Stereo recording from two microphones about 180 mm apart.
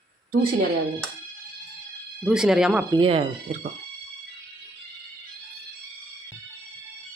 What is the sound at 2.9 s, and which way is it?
Speech, 30° right (ahead or behind).